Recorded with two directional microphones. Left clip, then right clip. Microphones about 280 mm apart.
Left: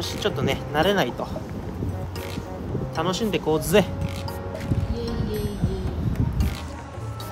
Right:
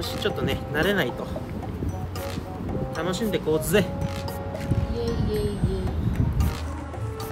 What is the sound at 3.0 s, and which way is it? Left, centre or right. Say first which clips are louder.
Speech: left 2 dB; centre.